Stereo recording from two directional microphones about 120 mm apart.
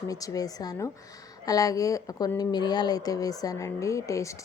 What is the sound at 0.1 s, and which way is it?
A woman's voice, 30° left (ahead or behind).